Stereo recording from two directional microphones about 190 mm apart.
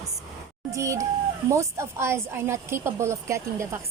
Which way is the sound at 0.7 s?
15° right (ahead or behind).